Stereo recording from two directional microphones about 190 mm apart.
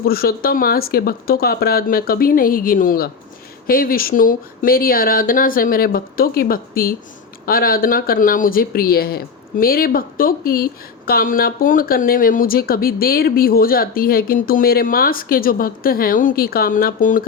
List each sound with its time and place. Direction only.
0.0 s speech: 50° left (ahead or behind)